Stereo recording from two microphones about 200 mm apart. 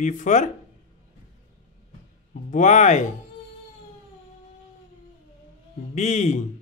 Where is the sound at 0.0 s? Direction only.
40° left (ahead or behind).